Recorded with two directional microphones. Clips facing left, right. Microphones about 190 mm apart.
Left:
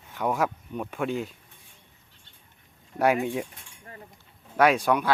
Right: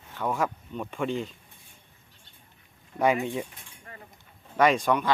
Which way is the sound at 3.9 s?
35° left (ahead or behind).